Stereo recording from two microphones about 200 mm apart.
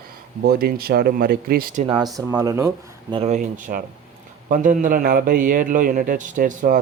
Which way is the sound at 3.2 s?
35° right (ahead or behind).